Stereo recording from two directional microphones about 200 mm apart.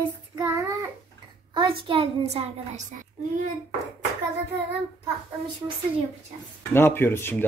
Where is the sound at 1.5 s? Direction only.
25° right (ahead or behind).